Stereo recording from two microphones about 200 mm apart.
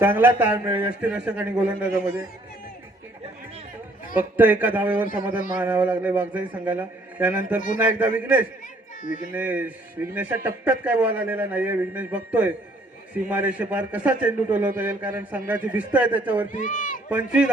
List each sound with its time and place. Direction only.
0.0 s speech: 10° right (ahead or behind)
4.2 s speech: 10° right (ahead or behind)
9.0 s speech: 40° left (ahead or behind)
9.3 s speech: 5° right (ahead or behind)
16.5 s speech: 40° left (ahead or behind)
17.1 s a man's voice: 5° right (ahead or behind)